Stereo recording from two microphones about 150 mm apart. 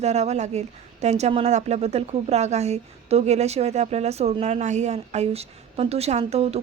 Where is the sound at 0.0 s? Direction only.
45° right (ahead or behind).